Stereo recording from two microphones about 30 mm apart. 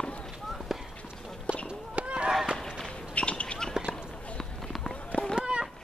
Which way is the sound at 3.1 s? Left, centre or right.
Left.